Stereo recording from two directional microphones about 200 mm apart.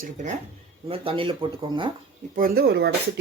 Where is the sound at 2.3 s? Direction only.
45° right (ahead or behind).